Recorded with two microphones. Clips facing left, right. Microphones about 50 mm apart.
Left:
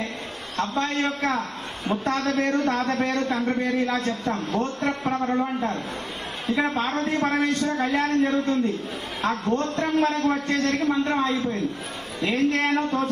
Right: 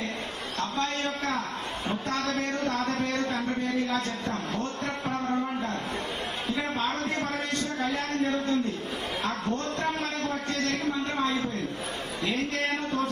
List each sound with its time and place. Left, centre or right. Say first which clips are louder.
0.5 s a man's voice: left 5 dB; left